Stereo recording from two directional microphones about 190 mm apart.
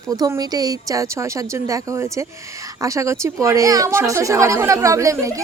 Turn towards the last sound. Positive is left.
turn(degrees=-15)  # may be behind; listen again after turning